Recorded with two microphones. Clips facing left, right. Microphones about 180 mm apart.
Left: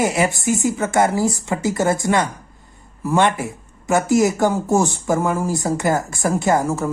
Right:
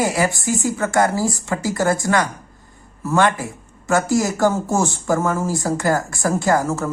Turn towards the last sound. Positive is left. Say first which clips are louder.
# even
turn(degrees=15)  # may be behind; listen again after turning